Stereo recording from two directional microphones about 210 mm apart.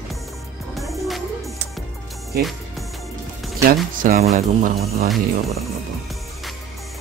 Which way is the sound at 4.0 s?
35° right (ahead or behind).